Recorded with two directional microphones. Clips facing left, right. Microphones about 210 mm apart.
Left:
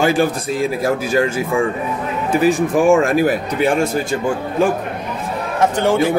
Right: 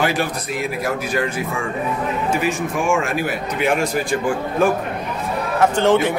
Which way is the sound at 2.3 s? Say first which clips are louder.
Left 10 dB; 35° left (ahead or behind).